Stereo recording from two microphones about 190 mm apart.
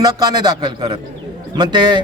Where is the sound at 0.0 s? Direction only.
20° right (ahead or behind).